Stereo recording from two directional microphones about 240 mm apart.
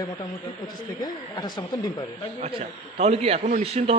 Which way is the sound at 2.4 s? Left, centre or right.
Right.